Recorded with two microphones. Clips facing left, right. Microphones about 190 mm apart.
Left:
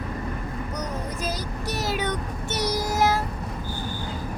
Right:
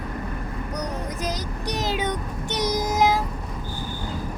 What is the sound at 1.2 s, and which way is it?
Music, 15° right (ahead or behind).